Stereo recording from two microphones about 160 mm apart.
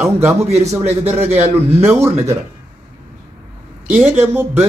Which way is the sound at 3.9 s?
10° right (ahead or behind).